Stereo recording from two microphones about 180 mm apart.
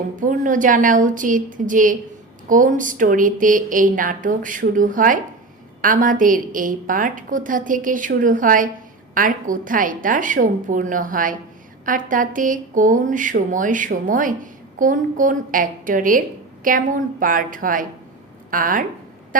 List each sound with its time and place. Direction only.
0.2 s speech: 45° right (ahead or behind)